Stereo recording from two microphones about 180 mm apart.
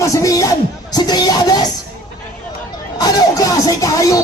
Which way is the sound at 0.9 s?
20° left (ahead or behind).